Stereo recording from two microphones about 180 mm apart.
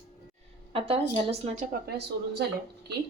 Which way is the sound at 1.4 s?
45° right (ahead or behind).